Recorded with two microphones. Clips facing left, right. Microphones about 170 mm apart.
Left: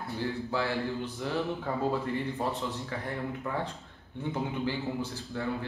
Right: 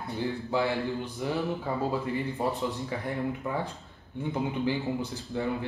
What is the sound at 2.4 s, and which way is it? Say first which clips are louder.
Speech: right 4 dB; 10° right (ahead or behind).